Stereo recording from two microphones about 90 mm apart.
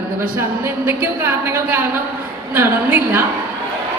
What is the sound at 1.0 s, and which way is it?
A woman's voice, 20° right (ahead or behind).